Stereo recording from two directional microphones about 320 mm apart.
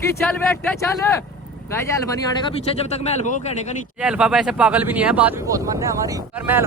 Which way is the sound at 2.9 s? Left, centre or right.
Centre.